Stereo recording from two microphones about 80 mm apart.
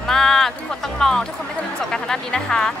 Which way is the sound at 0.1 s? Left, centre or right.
Centre.